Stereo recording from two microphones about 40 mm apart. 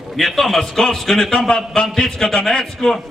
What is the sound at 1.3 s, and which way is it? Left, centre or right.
A man's voice, centre.